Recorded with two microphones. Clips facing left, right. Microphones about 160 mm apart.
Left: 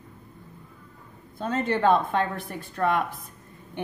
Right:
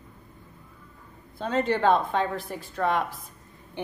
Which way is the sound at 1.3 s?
45° left (ahead or behind).